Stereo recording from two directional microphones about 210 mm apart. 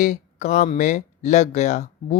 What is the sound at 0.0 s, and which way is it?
Speech, 35° left (ahead or behind).